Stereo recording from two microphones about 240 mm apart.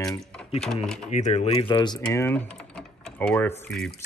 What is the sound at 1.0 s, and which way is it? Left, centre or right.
Speech, left.